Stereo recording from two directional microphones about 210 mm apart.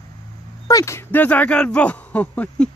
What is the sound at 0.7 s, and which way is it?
Speech, 15° left (ahead or behind).